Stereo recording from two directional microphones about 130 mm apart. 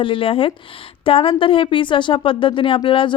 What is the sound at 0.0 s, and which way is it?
Speech, 45° left (ahead or behind).